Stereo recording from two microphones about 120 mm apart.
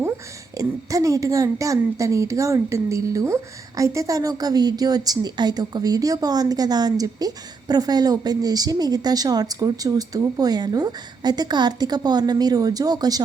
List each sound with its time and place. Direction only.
0.5 s a woman's voice: 30° right (ahead or behind)